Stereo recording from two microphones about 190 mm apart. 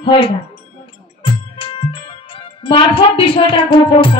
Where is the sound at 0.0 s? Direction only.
30° left (ahead or behind).